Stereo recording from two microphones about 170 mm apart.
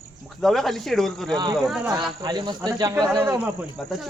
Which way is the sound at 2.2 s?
25° right (ahead or behind).